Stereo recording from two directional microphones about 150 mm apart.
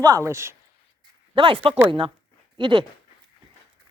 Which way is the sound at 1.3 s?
35° right (ahead or behind).